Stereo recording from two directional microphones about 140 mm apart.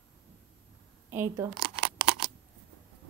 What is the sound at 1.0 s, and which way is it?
Speech, 15° right (ahead or behind).